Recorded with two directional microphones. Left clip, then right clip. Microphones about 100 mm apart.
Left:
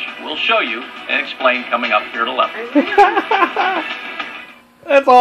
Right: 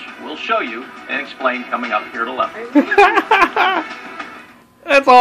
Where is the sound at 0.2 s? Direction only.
20° left (ahead or behind).